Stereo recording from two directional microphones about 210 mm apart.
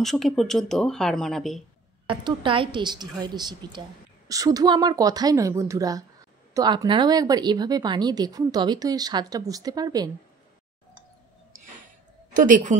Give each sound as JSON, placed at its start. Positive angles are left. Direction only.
{"t": 0.0, "sound": "speech", "side_deg": 0}
{"t": 2.0, "sound": "a woman's voice", "side_deg": -25}
{"t": 12.4, "sound": "a woman's voice", "side_deg": -40}